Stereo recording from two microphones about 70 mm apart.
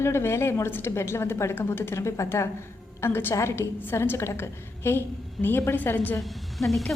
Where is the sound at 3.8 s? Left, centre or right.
Left.